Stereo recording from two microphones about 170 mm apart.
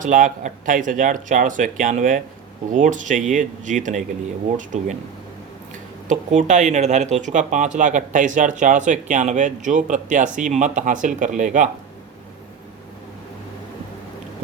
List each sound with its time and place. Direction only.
0.0 s speech: 50° right (ahead or behind)
6.1 s speech: 45° right (ahead or behind)